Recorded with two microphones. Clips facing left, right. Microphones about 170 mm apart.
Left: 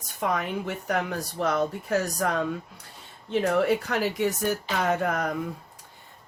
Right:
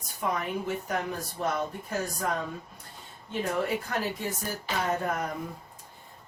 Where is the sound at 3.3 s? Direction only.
75° left (ahead or behind).